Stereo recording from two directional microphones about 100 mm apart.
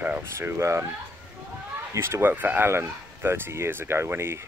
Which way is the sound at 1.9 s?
25° right (ahead or behind).